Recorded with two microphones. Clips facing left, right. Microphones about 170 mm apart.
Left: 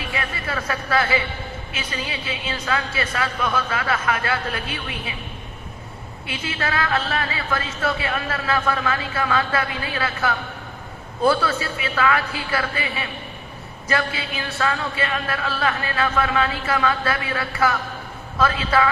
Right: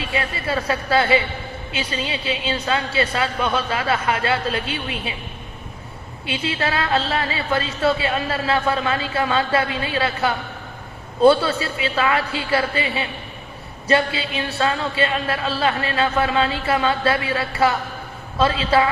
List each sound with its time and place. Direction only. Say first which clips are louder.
0.0 s speech: right 4 dB; 25° right (ahead or behind)
6.2 s speech: right 4 dB; 25° right (ahead or behind)